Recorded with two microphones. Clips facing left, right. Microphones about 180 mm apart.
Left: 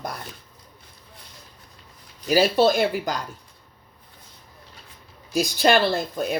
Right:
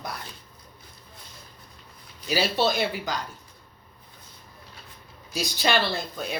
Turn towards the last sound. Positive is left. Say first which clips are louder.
# left 6 dB
turn(degrees=50)  # may be behind; listen again after turning